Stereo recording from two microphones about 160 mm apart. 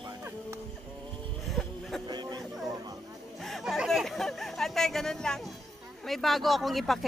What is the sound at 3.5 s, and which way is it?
Chatter, centre (ahead or behind).